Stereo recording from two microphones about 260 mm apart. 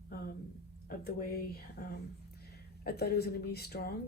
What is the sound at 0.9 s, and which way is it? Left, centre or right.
Speech, left.